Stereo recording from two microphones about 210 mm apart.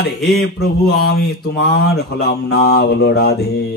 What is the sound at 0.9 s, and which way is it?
A man's voice, 50° left (ahead or behind).